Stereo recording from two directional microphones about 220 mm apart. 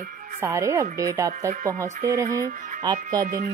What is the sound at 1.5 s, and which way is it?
Speech, 35° right (ahead or behind).